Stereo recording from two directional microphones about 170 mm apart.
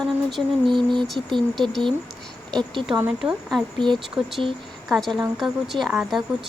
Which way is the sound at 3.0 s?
5° right (ahead or behind).